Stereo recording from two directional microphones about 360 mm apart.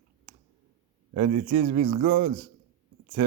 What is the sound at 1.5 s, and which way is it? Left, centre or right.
Speech, right.